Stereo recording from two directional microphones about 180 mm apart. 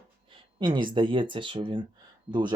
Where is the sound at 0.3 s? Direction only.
25° right (ahead or behind).